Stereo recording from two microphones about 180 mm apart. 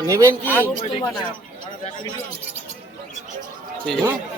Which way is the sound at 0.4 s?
10° left (ahead or behind).